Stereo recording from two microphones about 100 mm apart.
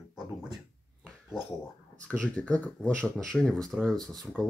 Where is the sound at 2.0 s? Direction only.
10° left (ahead or behind).